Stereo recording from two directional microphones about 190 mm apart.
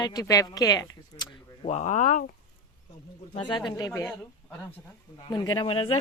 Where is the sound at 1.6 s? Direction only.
35° left (ahead or behind).